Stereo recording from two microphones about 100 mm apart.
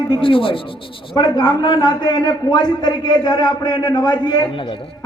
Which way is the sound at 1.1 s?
50° left (ahead or behind).